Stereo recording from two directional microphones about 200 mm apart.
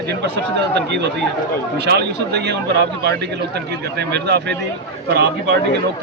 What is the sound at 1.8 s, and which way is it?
Speech, 55° right (ahead or behind).